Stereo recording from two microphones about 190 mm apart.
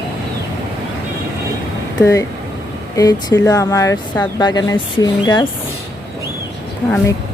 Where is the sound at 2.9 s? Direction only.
20° left (ahead or behind).